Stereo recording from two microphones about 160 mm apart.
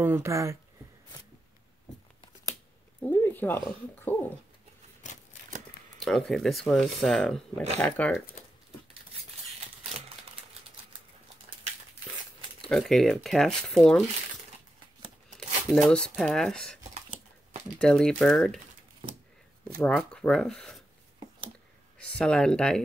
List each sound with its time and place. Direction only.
0.0 s speech: 15° right (ahead or behind)
3.0 s a sound: 10° left (ahead or behind)
5.9 s speech: centre (ahead or behind)
12.6 s speech: centre (ahead or behind)
15.3 s speech: 5° left (ahead or behind)
17.7 s speech: 5° left (ahead or behind)
19.8 s speech: 5° left (ahead or behind)
21.9 s speech: 5° left (ahead or behind)